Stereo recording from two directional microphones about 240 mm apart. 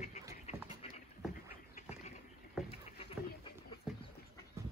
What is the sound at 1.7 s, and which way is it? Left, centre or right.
Duck, left.